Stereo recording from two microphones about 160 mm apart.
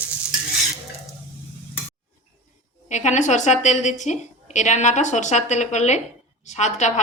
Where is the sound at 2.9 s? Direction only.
50° left (ahead or behind).